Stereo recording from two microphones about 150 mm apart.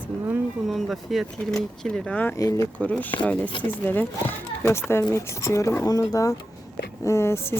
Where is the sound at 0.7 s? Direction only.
Centre (ahead or behind).